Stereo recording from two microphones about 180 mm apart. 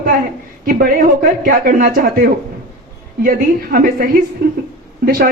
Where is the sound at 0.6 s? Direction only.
55° right (ahead or behind).